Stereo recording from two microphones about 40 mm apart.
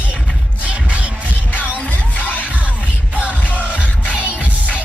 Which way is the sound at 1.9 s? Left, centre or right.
Left.